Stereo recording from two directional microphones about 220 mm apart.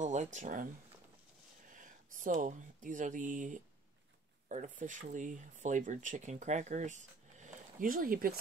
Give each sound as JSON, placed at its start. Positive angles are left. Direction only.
{"t": 0.0, "sound": "speech", "side_deg": -35}
{"t": 1.8, "sound": "speech", "side_deg": -35}